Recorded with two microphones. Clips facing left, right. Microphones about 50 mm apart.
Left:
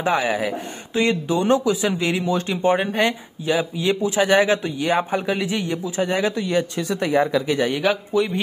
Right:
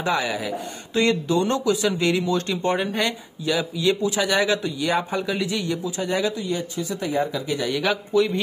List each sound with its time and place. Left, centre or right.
0.0 s a man's voice: left
0.9 s a man's voice: centre; by 6.3 s left
6.3 s speech: left
7.8 s speech: centre